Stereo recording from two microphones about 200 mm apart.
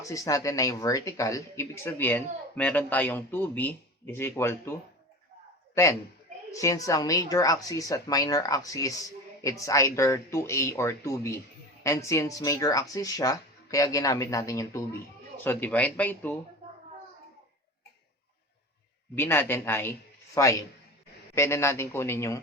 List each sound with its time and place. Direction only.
0.0 s speech: 15° left (ahead or behind)
5.7 s a man's voice: 15° left (ahead or behind)
19.1 s speech: 10° left (ahead or behind)